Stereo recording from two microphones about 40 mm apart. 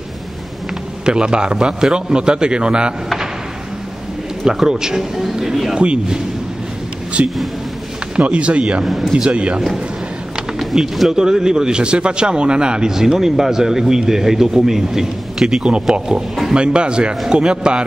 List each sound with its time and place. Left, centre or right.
1.0 s a man's voice: right
4.6 s a man's voice: centre
7.2 s speech: right
8.2 s a man's voice: right
8.8 s a man's voice: centre
9.3 s a man's voice: right
10.7 s a man's voice: centre
12.9 s a man's voice: centre
16.5 s a man's voice: right